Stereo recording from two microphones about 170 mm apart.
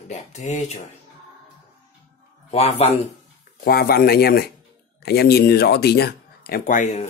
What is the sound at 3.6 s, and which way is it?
Speech, 60° left (ahead or behind).